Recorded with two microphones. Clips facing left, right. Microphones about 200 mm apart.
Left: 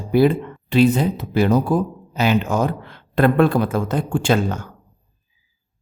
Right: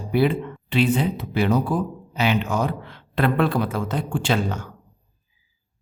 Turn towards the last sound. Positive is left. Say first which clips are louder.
# left 4 dB
turn(degrees=45)  # may be behind; listen again after turning